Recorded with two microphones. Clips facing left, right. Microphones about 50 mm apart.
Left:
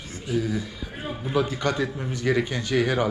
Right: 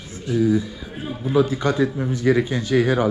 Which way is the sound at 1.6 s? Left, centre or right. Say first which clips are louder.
Right 5 dB; left.